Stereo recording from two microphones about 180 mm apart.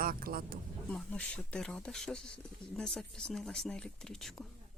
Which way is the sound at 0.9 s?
5° left (ahead or behind).